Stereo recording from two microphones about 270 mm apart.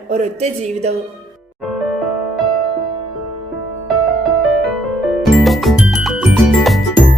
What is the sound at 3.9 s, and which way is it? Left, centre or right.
Music, centre.